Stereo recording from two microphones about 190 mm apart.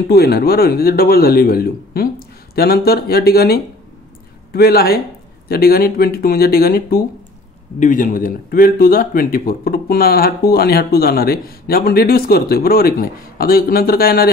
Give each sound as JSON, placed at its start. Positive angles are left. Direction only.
{"t": 0.1, "sound": "speech", "side_deg": 55}